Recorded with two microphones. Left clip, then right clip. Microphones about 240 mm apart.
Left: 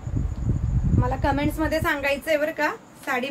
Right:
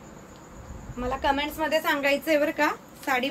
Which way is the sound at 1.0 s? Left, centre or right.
Left.